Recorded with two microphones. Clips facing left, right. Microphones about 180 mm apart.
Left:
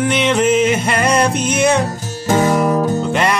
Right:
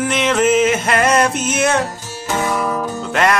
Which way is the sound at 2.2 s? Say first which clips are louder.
Left 6 dB; 40° left (ahead or behind).